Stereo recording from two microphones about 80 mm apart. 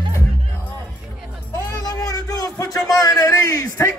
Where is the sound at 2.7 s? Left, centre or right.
Left.